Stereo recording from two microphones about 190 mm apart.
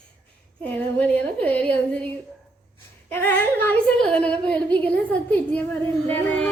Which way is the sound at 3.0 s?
10° left (ahead or behind).